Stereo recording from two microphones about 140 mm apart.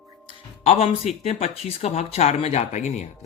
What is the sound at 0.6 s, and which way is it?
Speech, 50° left (ahead or behind).